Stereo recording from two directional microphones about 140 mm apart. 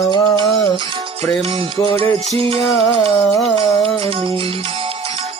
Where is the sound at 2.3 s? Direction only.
45° right (ahead or behind).